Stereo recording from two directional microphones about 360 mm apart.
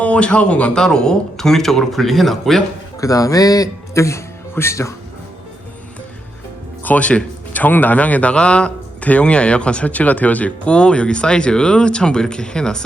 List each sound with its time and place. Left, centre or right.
0.0 s speech: centre
6.8 s speech: centre